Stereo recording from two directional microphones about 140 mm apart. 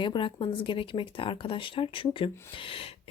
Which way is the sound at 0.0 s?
35° left (ahead or behind).